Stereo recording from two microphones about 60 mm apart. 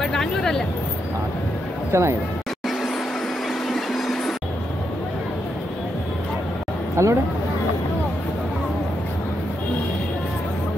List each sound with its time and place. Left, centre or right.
0.0 s speech: centre
1.9 s speech: right
3.6 s train: centre
7.0 s a sound: right